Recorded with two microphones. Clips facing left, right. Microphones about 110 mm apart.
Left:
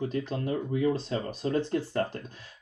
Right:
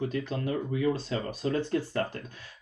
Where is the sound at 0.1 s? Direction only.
25° left (ahead or behind).